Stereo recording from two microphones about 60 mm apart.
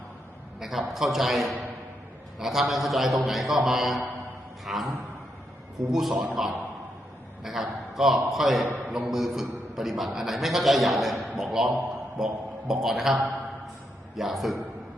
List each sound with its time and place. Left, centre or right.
0.6 s a man's voice: centre